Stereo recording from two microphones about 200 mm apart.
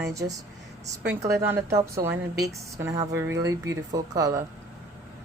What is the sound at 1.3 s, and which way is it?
A woman's voice, 15° right (ahead or behind).